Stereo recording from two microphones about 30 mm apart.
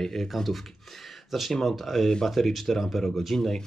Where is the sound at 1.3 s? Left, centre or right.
Centre.